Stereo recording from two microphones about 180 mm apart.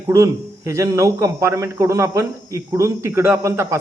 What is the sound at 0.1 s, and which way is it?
A man's voice, 15° right (ahead or behind).